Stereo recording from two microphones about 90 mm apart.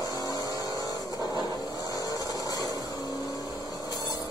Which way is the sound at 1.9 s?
45° left (ahead or behind).